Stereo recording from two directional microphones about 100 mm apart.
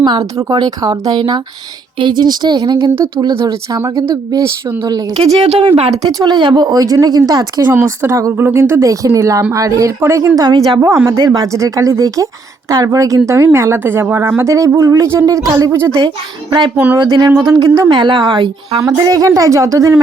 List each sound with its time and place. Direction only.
0.0 s speech: 45° right (ahead or behind)
2.0 s speech: 50° right (ahead or behind)
5.1 s speech: 75° right (ahead or behind)
5.9 s speech: 40° right (ahead or behind)
10.8 s speech: 30° right (ahead or behind)
16.0 s speech: 50° right (ahead or behind)
18.8 s speech: 35° right (ahead or behind)